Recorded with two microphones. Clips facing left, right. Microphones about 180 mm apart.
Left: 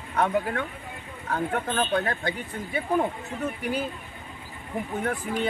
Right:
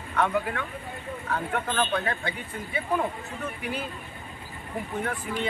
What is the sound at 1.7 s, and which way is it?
Speech, 35° left (ahead or behind).